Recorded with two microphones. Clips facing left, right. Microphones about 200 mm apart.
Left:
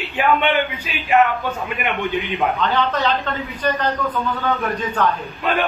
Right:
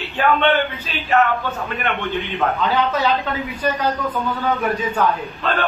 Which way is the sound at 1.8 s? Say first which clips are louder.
Left 1 dB; 15° left (ahead or behind).